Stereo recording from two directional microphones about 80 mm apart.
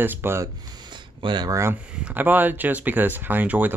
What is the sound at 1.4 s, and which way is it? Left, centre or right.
Speech, right.